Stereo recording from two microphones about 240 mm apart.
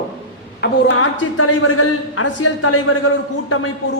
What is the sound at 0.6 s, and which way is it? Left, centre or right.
A man's voice, left.